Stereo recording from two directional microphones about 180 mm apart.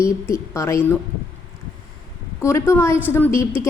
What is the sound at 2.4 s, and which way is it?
A woman's voice, 15° left (ahead or behind).